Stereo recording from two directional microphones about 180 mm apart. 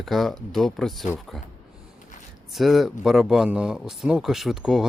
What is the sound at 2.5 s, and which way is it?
Speech, centre (ahead or behind).